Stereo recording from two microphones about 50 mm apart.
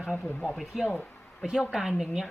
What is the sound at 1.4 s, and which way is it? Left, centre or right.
Speech, centre.